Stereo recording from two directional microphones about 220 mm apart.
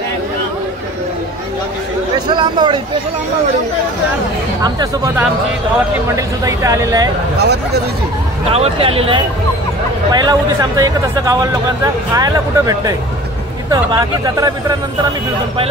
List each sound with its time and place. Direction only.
2.2 s speech: 20° right (ahead or behind)
4.6 s speech: 15° right (ahead or behind)
7.3 s speech: 50° right (ahead or behind)
8.5 s speech: 25° right (ahead or behind)